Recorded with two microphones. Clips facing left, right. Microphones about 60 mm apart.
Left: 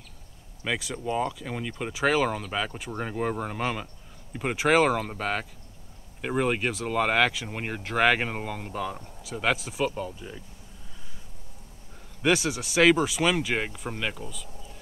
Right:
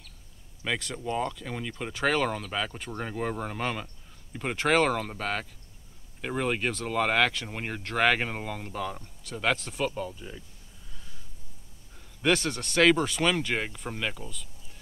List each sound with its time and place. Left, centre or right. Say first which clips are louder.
0.6 s speech: left 1 dB; centre
12.2 s speech: left 2 dB; centre